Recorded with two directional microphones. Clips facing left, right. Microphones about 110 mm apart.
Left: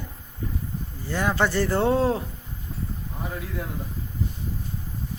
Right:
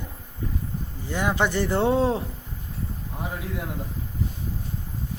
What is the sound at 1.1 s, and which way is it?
Speech, 15° right (ahead or behind).